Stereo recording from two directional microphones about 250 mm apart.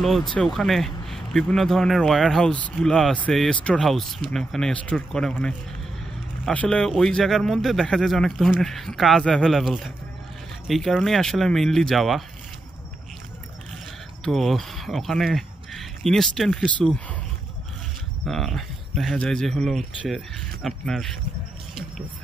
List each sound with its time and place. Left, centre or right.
0.0 s speech: centre
14.2 s speech: centre
18.2 s speech: centre